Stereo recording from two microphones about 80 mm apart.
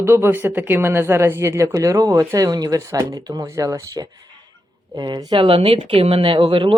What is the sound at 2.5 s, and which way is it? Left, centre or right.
Speech, right.